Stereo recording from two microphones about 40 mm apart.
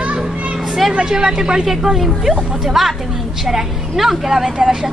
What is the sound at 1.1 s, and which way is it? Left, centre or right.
Speech, centre.